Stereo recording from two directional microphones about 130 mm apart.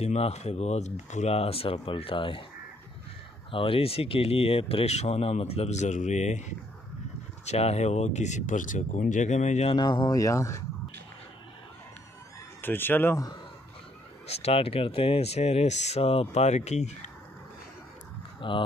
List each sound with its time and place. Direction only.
0.0 s speech: 55° left (ahead or behind)
3.5 s speech: 45° left (ahead or behind); by 6.4 s 65° left (ahead or behind)
7.4 s speech: 55° left (ahead or behind)
9.8 s speech: 35° left (ahead or behind)
12.6 s speech: 15° left (ahead or behind)
14.2 s speech: 50° left (ahead or behind)
18.4 s speech: 40° left (ahead or behind)